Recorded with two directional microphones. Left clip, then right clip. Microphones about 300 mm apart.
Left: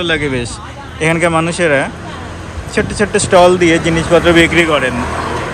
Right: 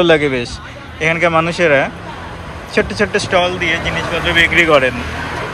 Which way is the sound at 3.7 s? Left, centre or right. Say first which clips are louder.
Left 4 dB; left.